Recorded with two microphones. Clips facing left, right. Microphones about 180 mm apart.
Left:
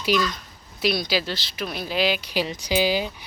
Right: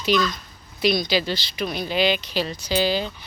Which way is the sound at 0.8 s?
5° left (ahead or behind).